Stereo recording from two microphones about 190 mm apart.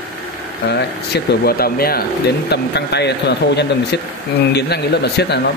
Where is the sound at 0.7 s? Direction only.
60° left (ahead or behind).